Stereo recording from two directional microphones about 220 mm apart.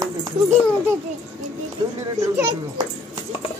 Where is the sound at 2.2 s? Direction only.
15° right (ahead or behind).